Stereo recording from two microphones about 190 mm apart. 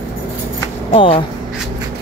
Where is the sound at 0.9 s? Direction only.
30° left (ahead or behind).